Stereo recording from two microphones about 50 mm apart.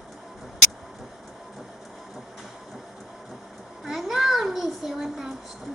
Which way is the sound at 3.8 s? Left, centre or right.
Centre.